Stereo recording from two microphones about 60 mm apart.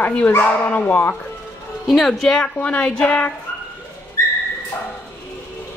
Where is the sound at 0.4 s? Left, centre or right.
Left.